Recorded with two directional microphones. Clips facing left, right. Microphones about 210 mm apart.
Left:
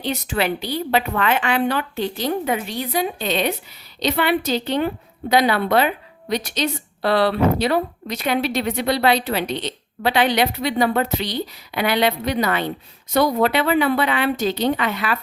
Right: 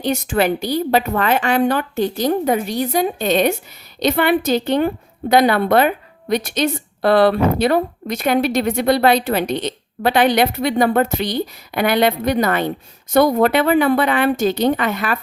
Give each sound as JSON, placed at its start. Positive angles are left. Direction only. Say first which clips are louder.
{"t": 0.0, "sound": "a woman's voice", "louder": "right 5 dB", "side_deg": -45}